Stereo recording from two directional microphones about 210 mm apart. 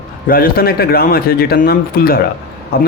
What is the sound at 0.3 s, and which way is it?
A man's voice, 45° left (ahead or behind).